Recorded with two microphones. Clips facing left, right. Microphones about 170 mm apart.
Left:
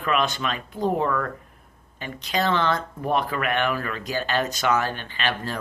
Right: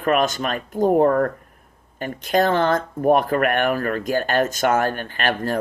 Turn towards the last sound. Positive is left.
turn(degrees=-50)  # may be behind; listen again after turning